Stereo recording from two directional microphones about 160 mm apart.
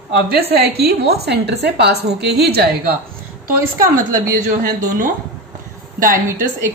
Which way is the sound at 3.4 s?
60° right (ahead or behind).